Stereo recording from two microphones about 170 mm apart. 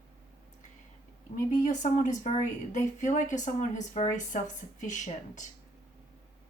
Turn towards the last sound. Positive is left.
turn(degrees=45)  # may be behind; listen again after turning